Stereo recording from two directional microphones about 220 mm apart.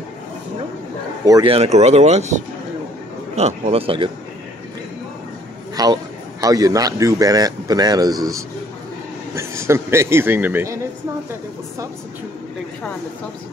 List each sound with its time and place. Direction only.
1.2 s speech: 20° right (ahead or behind)
5.8 s speech: 15° right (ahead or behind)